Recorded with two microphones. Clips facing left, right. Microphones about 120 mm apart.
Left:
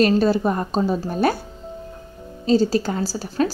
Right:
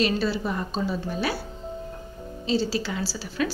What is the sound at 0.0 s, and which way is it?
A woman's voice, 45° left (ahead or behind).